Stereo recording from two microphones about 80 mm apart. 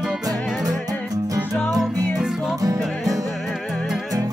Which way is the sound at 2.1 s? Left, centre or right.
Centre.